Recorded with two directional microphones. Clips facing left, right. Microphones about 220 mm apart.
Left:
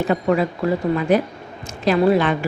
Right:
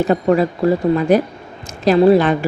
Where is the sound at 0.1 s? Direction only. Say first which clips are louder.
Right 3 dB; 40° right (ahead or behind).